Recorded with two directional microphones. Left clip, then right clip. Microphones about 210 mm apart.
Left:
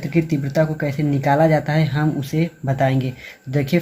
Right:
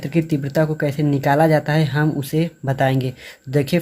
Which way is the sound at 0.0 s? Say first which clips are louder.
Even; 35° right (ahead or behind).